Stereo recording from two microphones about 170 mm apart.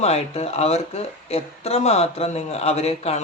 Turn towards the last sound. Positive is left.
turn(degrees=40)  # may be behind; listen again after turning